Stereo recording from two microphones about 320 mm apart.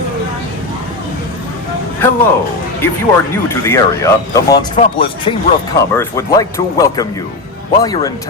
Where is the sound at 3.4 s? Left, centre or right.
Centre.